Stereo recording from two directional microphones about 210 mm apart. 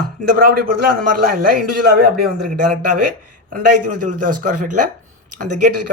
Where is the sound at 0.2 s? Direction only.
45° right (ahead or behind).